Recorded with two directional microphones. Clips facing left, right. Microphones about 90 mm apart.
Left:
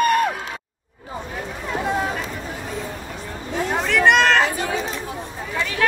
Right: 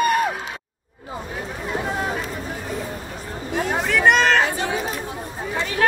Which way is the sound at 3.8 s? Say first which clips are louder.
Left 1 dB; 5° right (ahead or behind).